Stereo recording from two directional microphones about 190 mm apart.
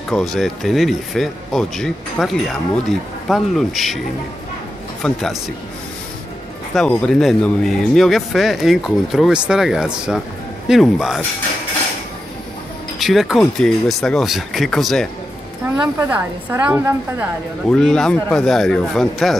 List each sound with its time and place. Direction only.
0.1 s speech: centre (ahead or behind)
5.0 s speech: centre (ahead or behind)
6.7 s speech: 5° left (ahead or behind)
13.0 s speech: centre (ahead or behind)
15.7 s a woman's voice: 10° right (ahead or behind)
17.6 s speech: 5° left (ahead or behind)